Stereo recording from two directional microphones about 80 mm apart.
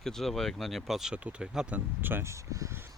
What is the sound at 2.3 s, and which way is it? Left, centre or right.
Speech, right.